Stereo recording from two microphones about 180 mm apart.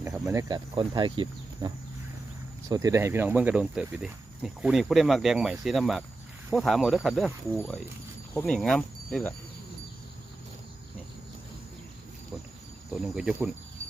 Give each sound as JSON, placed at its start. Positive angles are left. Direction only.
{"t": 0.3, "sound": "speech", "side_deg": -20}
{"t": 8.4, "sound": "speech", "side_deg": 5}
{"t": 12.9, "sound": "speech", "side_deg": -5}